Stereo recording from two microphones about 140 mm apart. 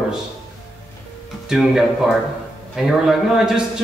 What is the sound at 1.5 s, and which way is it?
A man's voice, 5° right (ahead or behind).